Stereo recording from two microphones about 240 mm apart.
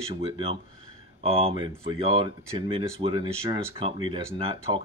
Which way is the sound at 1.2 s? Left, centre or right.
Right.